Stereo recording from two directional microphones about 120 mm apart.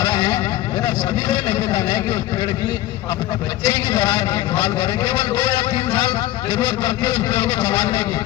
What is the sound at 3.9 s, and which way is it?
A man's voice, 40° left (ahead or behind).